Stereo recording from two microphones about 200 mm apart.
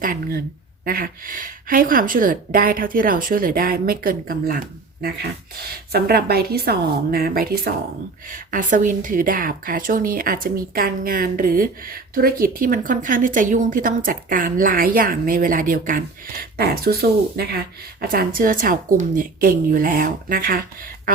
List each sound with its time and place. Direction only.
0.0 s a woman's voice: 45° right (ahead or behind)